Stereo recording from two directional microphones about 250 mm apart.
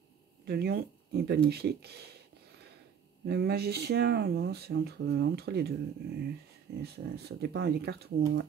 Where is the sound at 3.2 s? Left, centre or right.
Right.